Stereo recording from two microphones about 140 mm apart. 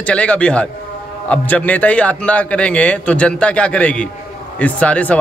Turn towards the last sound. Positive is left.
turn(degrees=10)  # may be behind; listen again after turning